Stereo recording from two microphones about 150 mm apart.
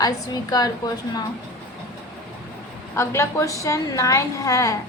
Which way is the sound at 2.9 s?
20° left (ahead or behind).